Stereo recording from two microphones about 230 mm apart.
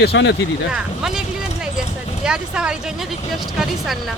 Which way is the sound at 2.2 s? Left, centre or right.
Centre.